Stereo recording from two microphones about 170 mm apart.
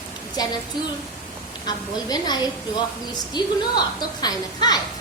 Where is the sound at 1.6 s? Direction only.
25° left (ahead or behind).